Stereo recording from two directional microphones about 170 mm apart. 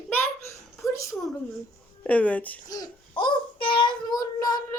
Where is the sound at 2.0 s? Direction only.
10° left (ahead or behind).